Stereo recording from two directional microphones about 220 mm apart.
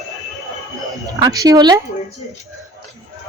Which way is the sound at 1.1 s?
15° right (ahead or behind).